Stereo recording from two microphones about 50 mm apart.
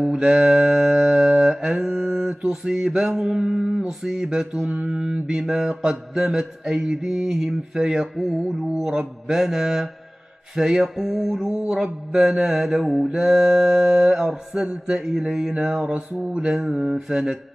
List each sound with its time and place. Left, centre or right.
0.1 s music: centre
1.4 s mantra: centre
3.5 s a sound: centre
4.0 s mantra: centre
13.1 s mantra: centre
15.5 s mantra: right
16.3 s mantra: centre